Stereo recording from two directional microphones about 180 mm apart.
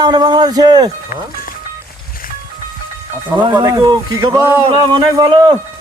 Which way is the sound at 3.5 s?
20° right (ahead or behind).